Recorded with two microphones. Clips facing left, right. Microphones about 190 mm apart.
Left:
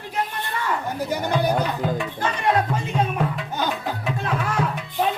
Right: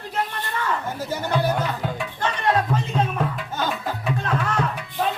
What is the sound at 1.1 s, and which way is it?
Speech, 15° left (ahead or behind).